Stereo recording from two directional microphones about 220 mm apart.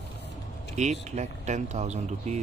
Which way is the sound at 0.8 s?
30° right (ahead or behind).